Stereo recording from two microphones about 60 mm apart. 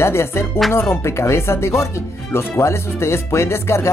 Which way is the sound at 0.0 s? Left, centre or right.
Left.